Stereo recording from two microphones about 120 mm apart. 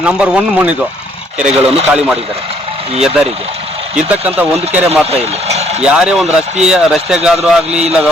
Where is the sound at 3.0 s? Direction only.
60° right (ahead or behind).